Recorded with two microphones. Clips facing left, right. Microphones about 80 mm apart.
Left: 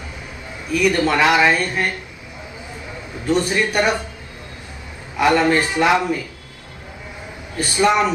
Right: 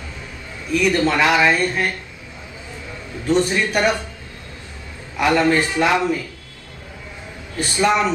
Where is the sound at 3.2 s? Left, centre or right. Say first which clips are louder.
Even; centre.